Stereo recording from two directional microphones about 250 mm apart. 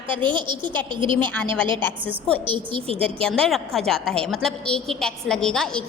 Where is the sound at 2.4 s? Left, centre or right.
Centre.